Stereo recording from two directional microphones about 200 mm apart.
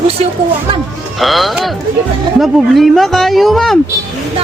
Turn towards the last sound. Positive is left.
turn(degrees=0)  # may be behind; listen again after turning